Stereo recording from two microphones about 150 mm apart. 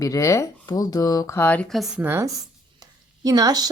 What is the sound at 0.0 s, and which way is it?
Speech, 20° left (ahead or behind).